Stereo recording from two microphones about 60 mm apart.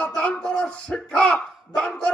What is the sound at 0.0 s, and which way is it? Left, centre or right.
Music, centre.